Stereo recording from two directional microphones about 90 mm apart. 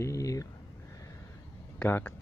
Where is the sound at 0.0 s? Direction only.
40° left (ahead or behind).